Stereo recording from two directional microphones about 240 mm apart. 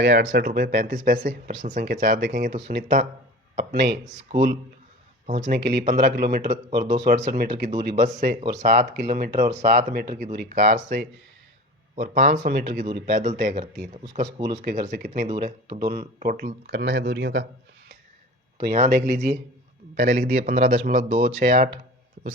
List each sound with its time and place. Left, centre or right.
0.0 s speech: right
4.0 s speech: right
18.6 s speech: right
20.0 s speech: right